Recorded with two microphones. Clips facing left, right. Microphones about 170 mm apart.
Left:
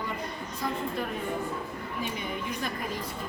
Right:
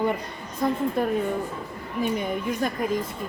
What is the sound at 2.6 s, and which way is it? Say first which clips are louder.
Speech: right 9 dB; 45° right (ahead or behind).